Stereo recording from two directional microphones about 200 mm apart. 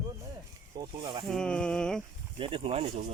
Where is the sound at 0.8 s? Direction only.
25° right (ahead or behind).